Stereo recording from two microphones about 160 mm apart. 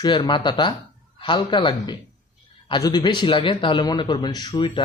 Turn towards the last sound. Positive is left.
turn(degrees=30)  # may be behind; listen again after turning